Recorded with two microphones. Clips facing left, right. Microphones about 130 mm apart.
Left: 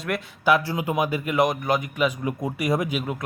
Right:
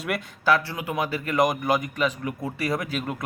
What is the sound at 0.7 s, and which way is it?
Speech, 25° left (ahead or behind).